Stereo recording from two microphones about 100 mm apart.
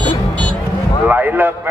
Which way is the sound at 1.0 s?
15° right (ahead or behind).